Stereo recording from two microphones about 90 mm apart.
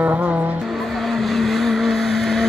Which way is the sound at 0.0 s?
20° right (ahead or behind).